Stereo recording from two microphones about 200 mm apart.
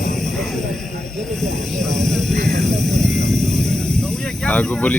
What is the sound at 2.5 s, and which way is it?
Speech, 35° right (ahead or behind).